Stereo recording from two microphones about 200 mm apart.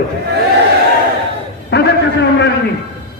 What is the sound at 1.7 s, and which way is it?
Speech, 55° left (ahead or behind).